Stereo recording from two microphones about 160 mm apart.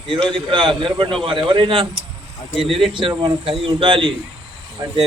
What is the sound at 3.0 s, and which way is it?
Speech, 25° right (ahead or behind).